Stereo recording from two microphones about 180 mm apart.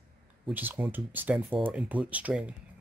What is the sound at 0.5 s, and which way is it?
Speech, 10° right (ahead or behind).